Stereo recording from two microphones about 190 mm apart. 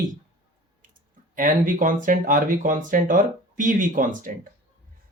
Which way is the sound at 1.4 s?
45° right (ahead or behind).